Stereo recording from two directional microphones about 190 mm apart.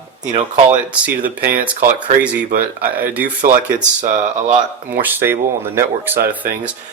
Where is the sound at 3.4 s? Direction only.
40° right (ahead or behind).